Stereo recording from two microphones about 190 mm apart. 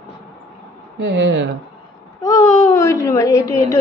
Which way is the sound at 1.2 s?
70° right (ahead or behind).